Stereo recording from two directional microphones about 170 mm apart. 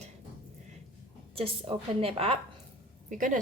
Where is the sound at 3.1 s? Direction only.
50° right (ahead or behind).